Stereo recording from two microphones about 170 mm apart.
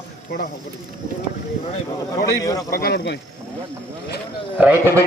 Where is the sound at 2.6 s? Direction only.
65° left (ahead or behind); by 3.2 s 80° left.